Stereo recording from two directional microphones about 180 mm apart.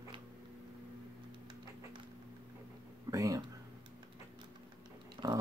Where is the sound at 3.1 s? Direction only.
20° right (ahead or behind).